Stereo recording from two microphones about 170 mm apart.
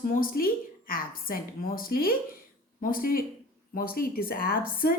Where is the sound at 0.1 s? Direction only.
60° left (ahead or behind).